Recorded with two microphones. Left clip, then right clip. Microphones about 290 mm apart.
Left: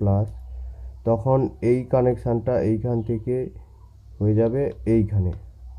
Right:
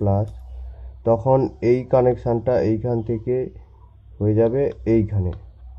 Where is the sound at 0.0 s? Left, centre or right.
Right.